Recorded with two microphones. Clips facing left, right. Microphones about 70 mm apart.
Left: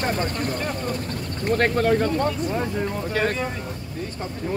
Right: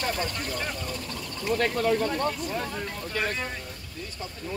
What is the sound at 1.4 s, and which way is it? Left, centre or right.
Speech, left.